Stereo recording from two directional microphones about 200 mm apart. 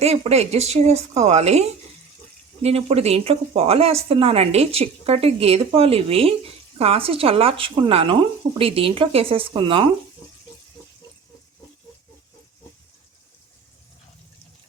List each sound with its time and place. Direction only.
0.0 s speech: 30° right (ahead or behind)